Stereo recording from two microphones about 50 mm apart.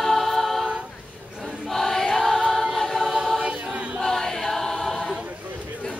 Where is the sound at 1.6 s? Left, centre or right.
Centre.